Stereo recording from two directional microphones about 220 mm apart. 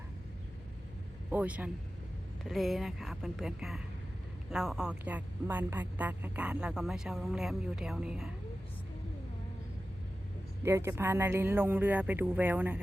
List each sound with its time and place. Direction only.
1.3 s speech: 5° right (ahead or behind)
10.6 s speech: 10° right (ahead or behind)